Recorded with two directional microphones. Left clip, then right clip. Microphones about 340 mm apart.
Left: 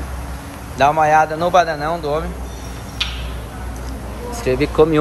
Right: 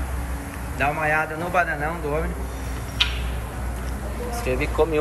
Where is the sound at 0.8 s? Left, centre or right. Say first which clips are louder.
Left 9 dB; centre.